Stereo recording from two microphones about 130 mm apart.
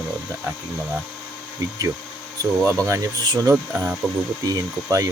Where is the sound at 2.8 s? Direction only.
25° right (ahead or behind).